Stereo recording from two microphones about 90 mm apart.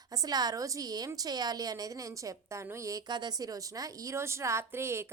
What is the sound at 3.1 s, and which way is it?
A woman's voice, 55° right (ahead or behind).